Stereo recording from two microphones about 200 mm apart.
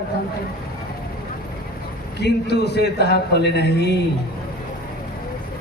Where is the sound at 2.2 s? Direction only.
55° left (ahead or behind).